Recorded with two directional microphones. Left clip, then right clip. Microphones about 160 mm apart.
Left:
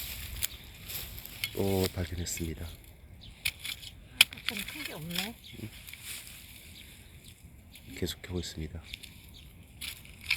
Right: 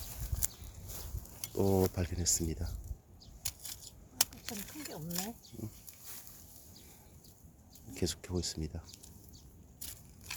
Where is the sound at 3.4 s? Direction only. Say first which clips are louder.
Left 10 dB; 20° right (ahead or behind).